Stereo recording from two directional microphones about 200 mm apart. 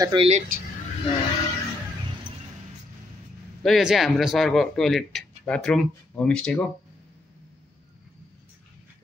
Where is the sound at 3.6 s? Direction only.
Centre (ahead or behind).